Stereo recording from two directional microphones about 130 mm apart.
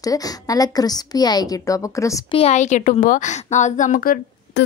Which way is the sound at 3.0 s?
80° left.